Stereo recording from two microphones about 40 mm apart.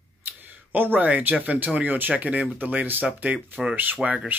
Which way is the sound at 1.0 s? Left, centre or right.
Right.